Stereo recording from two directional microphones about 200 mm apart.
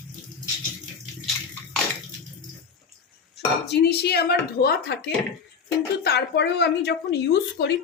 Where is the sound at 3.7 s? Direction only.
55° left (ahead or behind).